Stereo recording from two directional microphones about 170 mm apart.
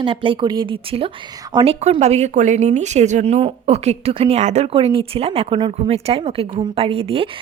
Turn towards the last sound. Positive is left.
turn(degrees=-35)  # may be behind; listen again after turning